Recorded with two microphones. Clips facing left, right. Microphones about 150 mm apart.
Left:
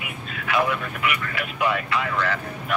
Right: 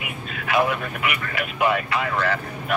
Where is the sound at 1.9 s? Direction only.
45° right (ahead or behind).